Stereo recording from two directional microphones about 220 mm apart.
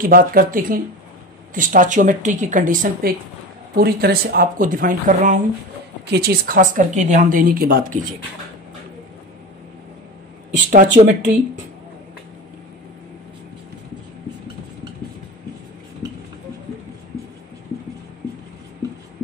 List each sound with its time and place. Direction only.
0.0 s speech: 40° right (ahead or behind)
6.0 s speech: 45° right (ahead or behind)
10.7 s speech: 35° right (ahead or behind)